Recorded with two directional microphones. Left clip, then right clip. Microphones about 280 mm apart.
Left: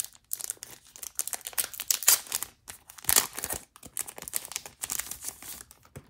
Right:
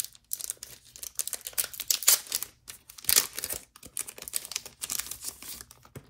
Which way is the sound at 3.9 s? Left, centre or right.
Centre.